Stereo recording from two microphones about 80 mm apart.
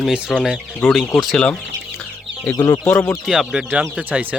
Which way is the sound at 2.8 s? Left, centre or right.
Left.